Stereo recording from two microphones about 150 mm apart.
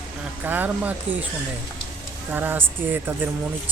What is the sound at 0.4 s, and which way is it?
Speech, 10° right (ahead or behind).